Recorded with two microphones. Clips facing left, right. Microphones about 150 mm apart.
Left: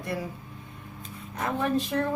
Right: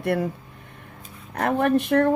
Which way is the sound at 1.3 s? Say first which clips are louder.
Right 6 dB; 65° right (ahead or behind).